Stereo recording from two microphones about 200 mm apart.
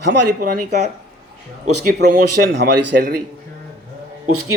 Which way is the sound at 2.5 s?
60° right (ahead or behind).